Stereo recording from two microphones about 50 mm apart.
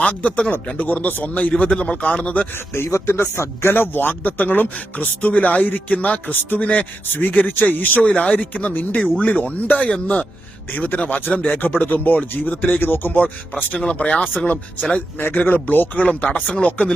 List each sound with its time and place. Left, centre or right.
0.0 s speech: left
2.7 s speech: left
8.0 s speech: left
13.7 s speech: left
15.2 s speech: left